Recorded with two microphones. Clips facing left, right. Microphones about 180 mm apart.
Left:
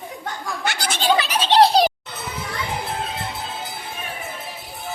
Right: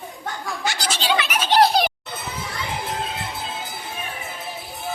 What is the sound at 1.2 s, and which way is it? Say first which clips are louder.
Baby laughter: left 1 dB; 30° left (ahead or behind).